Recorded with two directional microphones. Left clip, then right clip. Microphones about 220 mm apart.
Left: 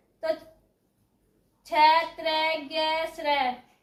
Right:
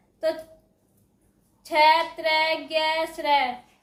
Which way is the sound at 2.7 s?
30° right (ahead or behind).